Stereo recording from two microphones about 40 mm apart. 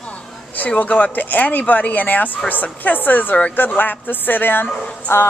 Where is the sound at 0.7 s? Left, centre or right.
Left.